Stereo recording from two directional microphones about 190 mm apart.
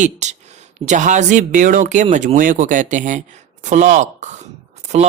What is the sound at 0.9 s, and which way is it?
Speech, 40° right (ahead or behind).